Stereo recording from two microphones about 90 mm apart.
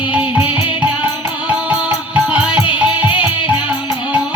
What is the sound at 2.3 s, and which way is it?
Music, 15° right (ahead or behind).